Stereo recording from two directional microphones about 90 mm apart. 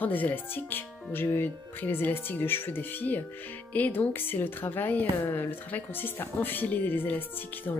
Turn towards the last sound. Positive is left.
turn(degrees=20)  # may be behind; listen again after turning